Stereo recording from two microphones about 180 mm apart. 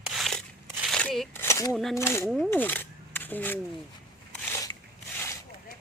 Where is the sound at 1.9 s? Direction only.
15° left (ahead or behind).